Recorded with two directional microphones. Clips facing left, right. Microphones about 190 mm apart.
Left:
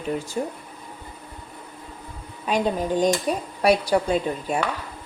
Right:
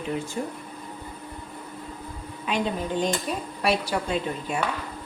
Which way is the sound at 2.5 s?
40° left (ahead or behind).